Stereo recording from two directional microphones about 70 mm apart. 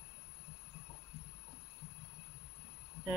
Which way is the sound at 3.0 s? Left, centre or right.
Left.